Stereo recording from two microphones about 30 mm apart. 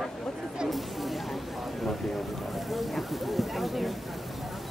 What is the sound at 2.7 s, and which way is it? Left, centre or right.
Speech, centre.